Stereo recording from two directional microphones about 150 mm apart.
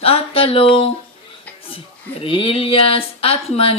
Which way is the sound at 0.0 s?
40° left (ahead or behind).